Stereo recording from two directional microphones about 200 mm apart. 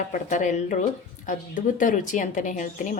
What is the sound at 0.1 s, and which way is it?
A woman's voice, 40° left (ahead or behind).